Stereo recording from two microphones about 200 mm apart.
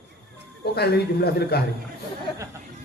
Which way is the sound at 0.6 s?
55° left (ahead or behind).